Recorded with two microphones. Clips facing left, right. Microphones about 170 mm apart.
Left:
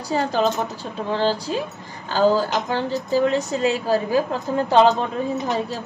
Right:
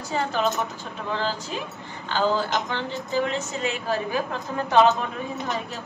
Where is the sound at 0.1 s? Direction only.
35° left (ahead or behind).